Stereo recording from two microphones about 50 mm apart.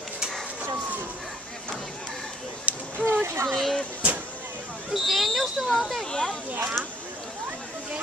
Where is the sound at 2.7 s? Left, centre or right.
Right.